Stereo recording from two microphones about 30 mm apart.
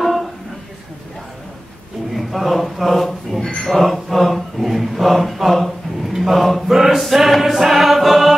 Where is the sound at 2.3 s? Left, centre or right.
Centre.